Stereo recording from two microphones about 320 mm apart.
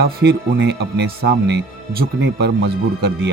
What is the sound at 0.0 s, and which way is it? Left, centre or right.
Speech, right.